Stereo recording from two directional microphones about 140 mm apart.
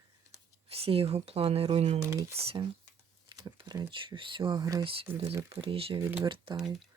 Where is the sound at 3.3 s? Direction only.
30° right (ahead or behind).